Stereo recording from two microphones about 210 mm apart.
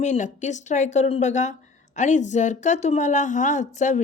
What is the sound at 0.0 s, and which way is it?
A woman's voice, 35° left (ahead or behind).